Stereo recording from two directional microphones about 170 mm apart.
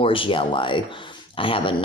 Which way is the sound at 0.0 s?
30° left (ahead or behind).